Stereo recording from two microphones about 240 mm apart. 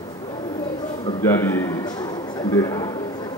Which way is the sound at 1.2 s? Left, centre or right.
Centre.